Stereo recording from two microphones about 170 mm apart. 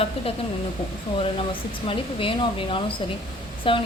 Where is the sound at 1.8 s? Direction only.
30° left (ahead or behind).